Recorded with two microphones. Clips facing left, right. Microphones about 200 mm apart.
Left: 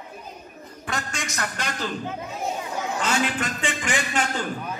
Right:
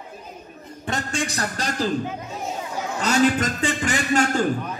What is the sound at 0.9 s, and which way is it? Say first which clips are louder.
A man's voice: right 5 dB; 30° right (ahead or behind).